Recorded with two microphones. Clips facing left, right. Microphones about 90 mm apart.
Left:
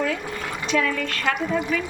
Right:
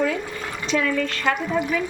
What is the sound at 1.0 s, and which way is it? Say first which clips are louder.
Speech: right 2 dB; 15° right (ahead or behind).